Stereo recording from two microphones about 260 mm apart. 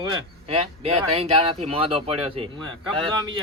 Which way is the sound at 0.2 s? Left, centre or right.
Right.